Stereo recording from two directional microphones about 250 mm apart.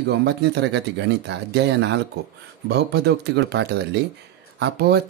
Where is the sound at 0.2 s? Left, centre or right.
Right.